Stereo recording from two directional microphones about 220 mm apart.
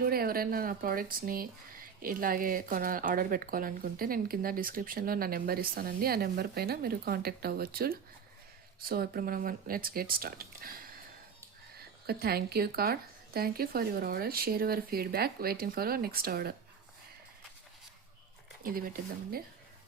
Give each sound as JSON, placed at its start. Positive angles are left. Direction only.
{"t": 0.0, "sound": "speech", "side_deg": -45}
{"t": 12.0, "sound": "speech", "side_deg": -45}
{"t": 18.6, "sound": "speech", "side_deg": -40}